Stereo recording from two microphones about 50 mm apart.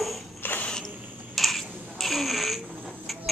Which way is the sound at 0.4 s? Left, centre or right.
Left.